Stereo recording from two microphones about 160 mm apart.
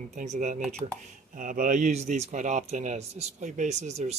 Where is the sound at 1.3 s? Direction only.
55° right (ahead or behind).